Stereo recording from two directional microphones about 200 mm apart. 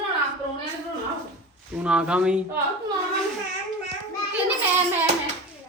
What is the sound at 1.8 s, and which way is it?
Speech, 5° right (ahead or behind).